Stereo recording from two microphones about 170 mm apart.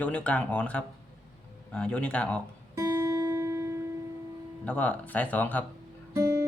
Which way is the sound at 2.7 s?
20° right (ahead or behind).